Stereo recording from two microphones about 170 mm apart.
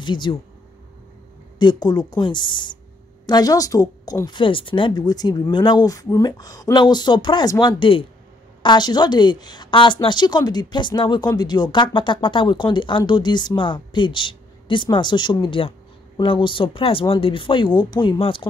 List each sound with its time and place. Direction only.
0.0 s a woman's voice: 25° left (ahead or behind)
1.6 s a woman's voice: 25° left (ahead or behind)